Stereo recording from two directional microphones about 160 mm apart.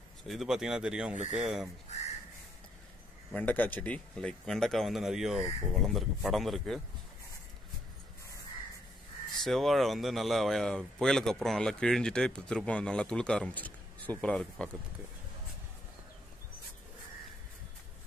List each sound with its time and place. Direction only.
0.3 s speech: centre (ahead or behind)
1.1 s speech: 45° right (ahead or behind)
1.4 s speech: 5° right (ahead or behind)
1.9 s a sound: 45° left (ahead or behind)
3.3 s speech: 10° left (ahead or behind)
9.4 s speech: centre (ahead or behind)